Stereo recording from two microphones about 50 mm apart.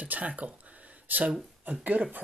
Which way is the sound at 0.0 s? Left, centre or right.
Right.